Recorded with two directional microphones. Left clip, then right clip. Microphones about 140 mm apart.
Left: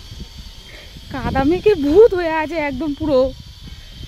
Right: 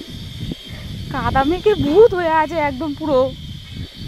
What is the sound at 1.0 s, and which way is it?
Speech, 30° left (ahead or behind).